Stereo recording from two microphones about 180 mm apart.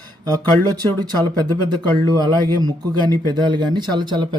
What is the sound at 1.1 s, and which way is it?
Speech, 20° right (ahead or behind).